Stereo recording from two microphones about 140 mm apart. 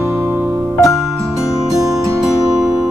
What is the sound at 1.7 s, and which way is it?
Music, 25° right (ahead or behind).